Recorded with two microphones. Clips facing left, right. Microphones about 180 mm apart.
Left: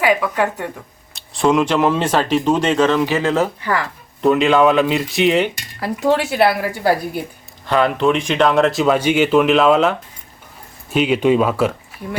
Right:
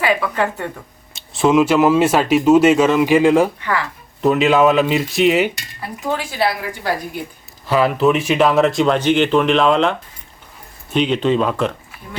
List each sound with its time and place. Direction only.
0.0 s speech: 15° left (ahead or behind)
1.1 s speech: centre (ahead or behind)
3.6 s speech: 40° left (ahead or behind)
4.2 s speech: centre (ahead or behind)
5.8 s speech: 80° left
7.7 s speech: 5° right (ahead or behind)
10.9 s speech: 5° left (ahead or behind)